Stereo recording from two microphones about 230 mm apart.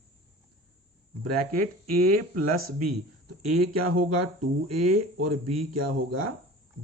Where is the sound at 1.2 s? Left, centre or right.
Right.